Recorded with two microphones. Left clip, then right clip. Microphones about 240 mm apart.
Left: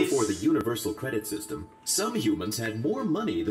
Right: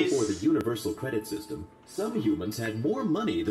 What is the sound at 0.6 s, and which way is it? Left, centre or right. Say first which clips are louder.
Speech: left 1 dB; centre.